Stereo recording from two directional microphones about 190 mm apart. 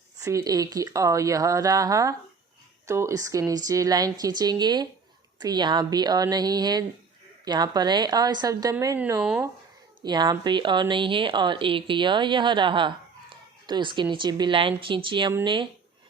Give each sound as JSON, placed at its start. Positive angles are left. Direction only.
{"t": 0.3, "sound": "speech", "side_deg": -15}